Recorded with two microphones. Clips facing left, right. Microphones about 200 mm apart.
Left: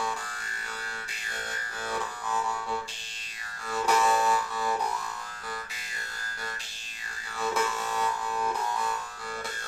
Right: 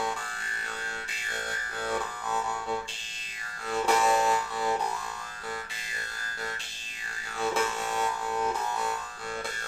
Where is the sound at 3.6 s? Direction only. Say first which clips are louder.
Right 1 dB; 20° right (ahead or behind).